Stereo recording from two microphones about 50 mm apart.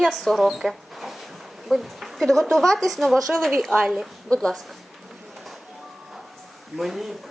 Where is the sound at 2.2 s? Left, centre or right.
Centre.